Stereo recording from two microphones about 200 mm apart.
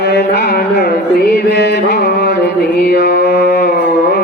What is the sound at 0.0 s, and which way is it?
Music, 60° left (ahead or behind).